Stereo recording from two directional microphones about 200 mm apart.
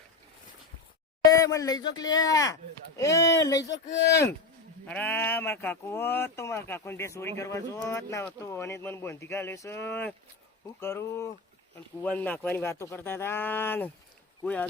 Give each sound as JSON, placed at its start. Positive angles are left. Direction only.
{"t": 1.3, "sound": "speech", "side_deg": 15}
{"t": 3.7, "sound": "speech", "side_deg": 60}
{"t": 4.9, "sound": "speech", "side_deg": 10}